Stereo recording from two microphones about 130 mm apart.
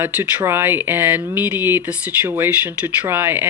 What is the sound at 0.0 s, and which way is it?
Speech, 15° right (ahead or behind).